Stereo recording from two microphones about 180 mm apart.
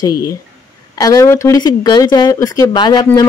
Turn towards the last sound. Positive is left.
turn(degrees=20)  # may be behind; listen again after turning